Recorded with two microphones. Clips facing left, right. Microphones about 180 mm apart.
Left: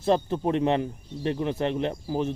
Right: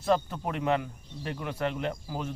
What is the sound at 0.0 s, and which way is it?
Speech, 25° left (ahead or behind).